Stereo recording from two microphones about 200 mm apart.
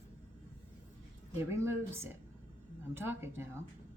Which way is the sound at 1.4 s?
10° right (ahead or behind).